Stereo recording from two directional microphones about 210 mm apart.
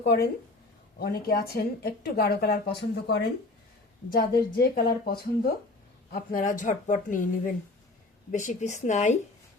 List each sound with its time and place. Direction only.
0.0 s a woman's voice: 45° left (ahead or behind)